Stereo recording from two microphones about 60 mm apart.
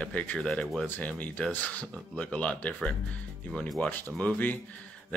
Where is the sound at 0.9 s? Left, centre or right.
Left.